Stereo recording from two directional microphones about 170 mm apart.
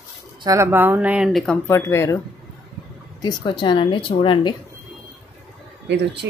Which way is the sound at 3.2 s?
25° left (ahead or behind).